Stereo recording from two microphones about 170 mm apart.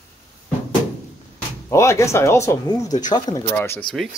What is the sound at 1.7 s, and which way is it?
Speech, 15° left (ahead or behind).